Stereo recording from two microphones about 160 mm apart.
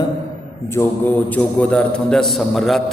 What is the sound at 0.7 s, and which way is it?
A man's voice, 15° left (ahead or behind).